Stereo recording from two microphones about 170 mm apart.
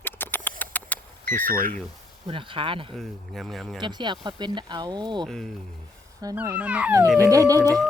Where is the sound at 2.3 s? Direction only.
30° right (ahead or behind).